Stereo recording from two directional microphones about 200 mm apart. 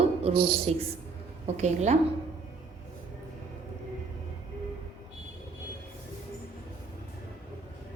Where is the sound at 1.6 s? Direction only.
35° right (ahead or behind).